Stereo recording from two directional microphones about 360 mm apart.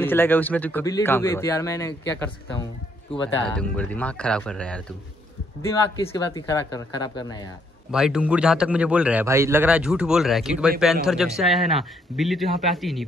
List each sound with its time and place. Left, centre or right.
0.0 s speech: centre
3.5 s speech: centre
7.9 s speech: centre